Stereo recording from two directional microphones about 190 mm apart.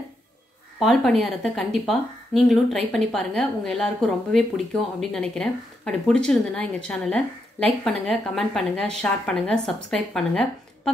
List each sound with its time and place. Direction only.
0.7 s speech: centre (ahead or behind)